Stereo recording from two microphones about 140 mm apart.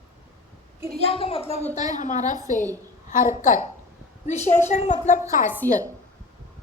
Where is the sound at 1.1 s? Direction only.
45° left (ahead or behind).